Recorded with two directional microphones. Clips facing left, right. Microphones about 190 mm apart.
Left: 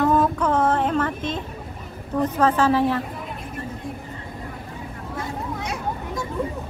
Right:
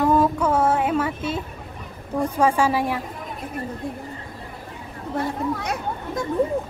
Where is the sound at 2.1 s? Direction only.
10° right (ahead or behind).